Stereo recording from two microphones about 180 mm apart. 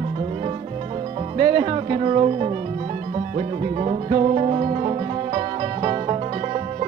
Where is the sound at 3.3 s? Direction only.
35° right (ahead or behind).